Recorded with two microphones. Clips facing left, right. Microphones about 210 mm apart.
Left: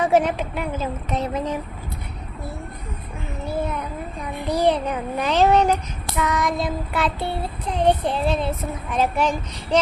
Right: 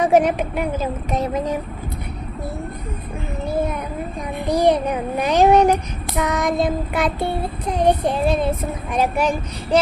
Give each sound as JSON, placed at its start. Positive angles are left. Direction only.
{"t": 0.0, "sound": "child singing", "side_deg": -15}
{"t": 4.4, "sound": "child singing", "side_deg": -15}